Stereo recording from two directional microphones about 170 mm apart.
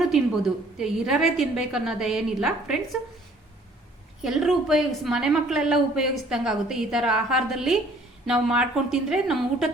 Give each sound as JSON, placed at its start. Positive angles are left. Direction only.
{"t": 0.0, "sound": "a woman's voice", "side_deg": 0}
{"t": 4.2, "sound": "a woman's voice", "side_deg": 0}